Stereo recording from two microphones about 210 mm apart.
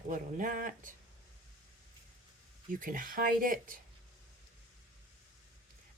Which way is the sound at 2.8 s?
40° right (ahead or behind).